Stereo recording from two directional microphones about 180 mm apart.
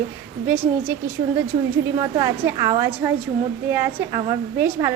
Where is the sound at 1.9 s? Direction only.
20° right (ahead or behind).